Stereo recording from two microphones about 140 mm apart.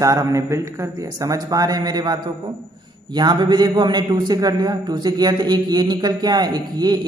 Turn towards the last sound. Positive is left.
turn(degrees=-30)  # may be behind; listen again after turning